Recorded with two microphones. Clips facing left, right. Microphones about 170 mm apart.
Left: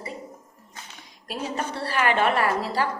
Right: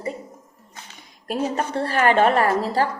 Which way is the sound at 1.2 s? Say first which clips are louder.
Right 6 dB; 40° right (ahead or behind).